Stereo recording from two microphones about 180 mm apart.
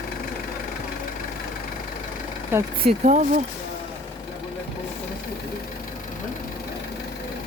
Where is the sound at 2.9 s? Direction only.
40° right (ahead or behind).